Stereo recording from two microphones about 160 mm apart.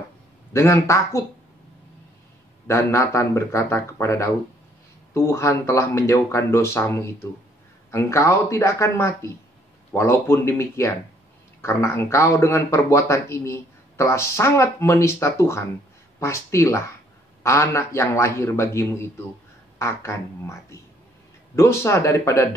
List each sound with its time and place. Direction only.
0.5 s a man's voice: 20° left (ahead or behind)
2.7 s a man's voice: 15° left (ahead or behind)